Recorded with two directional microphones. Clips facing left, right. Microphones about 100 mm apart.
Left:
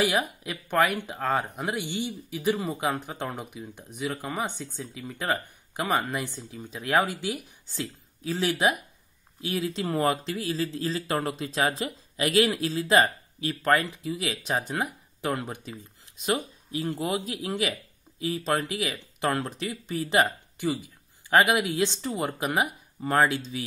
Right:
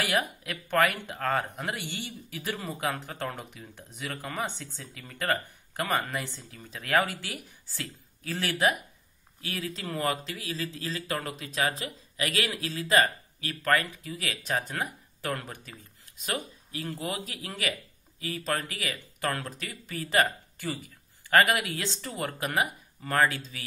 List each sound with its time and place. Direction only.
0.0 s speech: 10° left (ahead or behind)